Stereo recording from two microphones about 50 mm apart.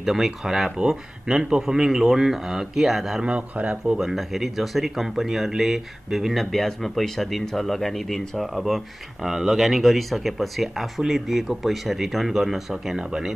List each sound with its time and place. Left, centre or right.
0.0 s speech: centre
3.3 s speech: right
3.8 s speech: centre